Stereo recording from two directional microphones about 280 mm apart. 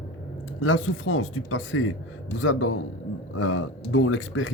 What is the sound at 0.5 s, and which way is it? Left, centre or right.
A man's voice, left.